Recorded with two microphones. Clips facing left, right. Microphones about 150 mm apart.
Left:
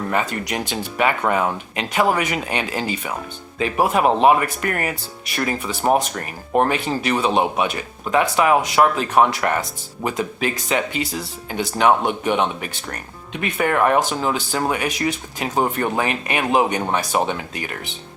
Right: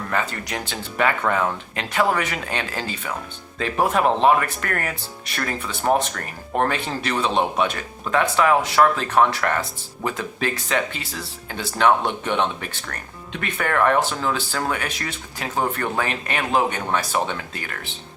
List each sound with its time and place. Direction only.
0.1 s speech: 15° left (ahead or behind)